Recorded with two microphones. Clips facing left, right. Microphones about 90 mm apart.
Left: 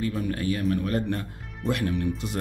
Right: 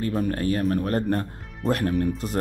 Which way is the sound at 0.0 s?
40° right (ahead or behind).